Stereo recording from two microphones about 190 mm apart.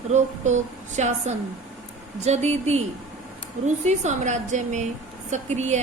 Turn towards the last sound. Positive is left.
turn(degrees=-35)  # may be behind; listen again after turning